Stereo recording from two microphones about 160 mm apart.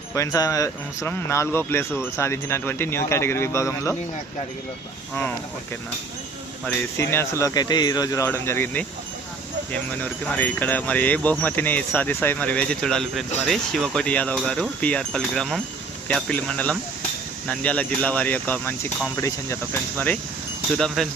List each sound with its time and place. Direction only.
0.1 s speech: 20° left (ahead or behind)
6.7 s speech: 15° left (ahead or behind)
20.7 s speech: centre (ahead or behind)